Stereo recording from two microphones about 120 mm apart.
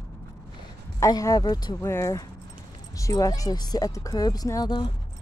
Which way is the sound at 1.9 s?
25° left (ahead or behind).